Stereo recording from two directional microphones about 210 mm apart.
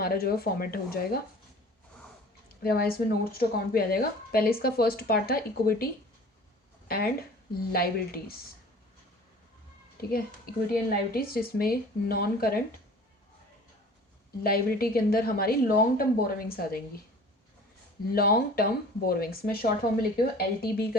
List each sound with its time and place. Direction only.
0.0 s a woman's voice: 45° left (ahead or behind)
2.6 s a woman's voice: 45° left (ahead or behind)
10.1 s a woman's voice: 45° left (ahead or behind)
14.4 s a woman's voice: 45° left (ahead or behind)
18.1 s a woman's voice: 45° left (ahead or behind)